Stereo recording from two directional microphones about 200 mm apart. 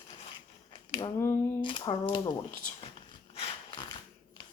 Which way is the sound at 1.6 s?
25° left (ahead or behind).